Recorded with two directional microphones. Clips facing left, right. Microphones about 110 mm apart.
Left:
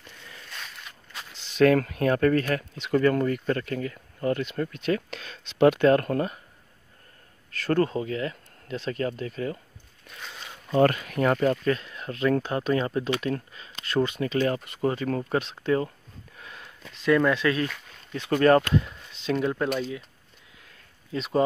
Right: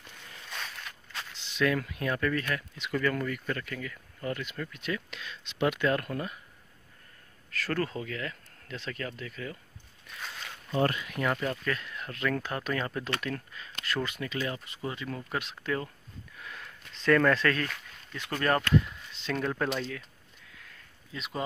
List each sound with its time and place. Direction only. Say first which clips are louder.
1.4 s speech: left 9 dB; 40° left (ahead or behind)
4.9 s speech: left 7 dB; 40° left (ahead or behind)
7.6 s speech: left 8 dB; 30° left (ahead or behind)
9.0 s speech: left 9 dB; 35° left (ahead or behind)
10.7 s speech: left 7 dB; 65° left (ahead or behind)
11.1 s speech: left 8 dB; 40° left (ahead or behind)
11.6 s speech: left 7 dB; 25° left (ahead or behind)
14.4 s speech: left 11 dB; 55° left (ahead or behind)
15.2 s speech: left 8 dB; 30° left (ahead or behind)
16.3 s sniff: even; 25° left (ahead or behind)
17.0 s speech: left 2 dB; 10° left (ahead or behind)
18.4 s speech: left 6 dB; 30° left (ahead or behind)
19.2 s speech: left 6 dB; 15° left (ahead or behind)
21.1 s speech: left 11 dB; 35° left (ahead or behind)